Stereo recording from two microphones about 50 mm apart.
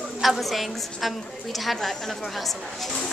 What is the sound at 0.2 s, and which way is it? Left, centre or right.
Speech, centre.